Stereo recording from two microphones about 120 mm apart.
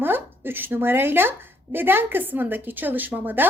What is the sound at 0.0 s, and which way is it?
A woman's voice, 15° right (ahead or behind).